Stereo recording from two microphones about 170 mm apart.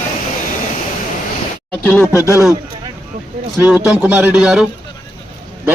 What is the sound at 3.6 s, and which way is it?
Speech, 5° right (ahead or behind).